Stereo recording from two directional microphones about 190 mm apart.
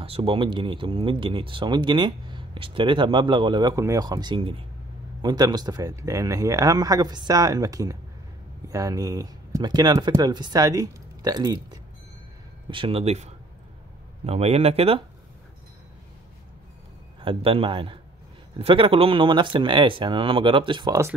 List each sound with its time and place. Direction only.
0.0 s speech: 30° right (ahead or behind)
17.2 s speech: 30° right (ahead or behind)